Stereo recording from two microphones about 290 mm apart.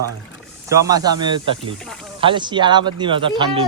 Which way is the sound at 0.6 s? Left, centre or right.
Centre.